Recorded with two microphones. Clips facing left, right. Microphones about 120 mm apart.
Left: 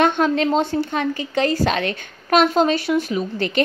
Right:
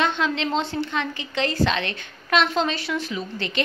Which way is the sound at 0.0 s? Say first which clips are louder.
Left 6 dB; 50° left (ahead or behind).